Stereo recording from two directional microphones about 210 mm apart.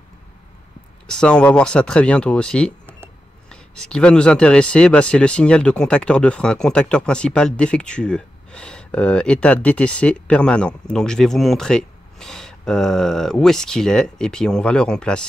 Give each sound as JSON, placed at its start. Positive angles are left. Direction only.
{"t": 1.0, "sound": "speech", "side_deg": 5}